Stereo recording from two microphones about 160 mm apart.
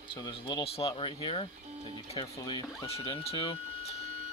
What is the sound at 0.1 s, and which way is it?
Speech, 35° left (ahead or behind).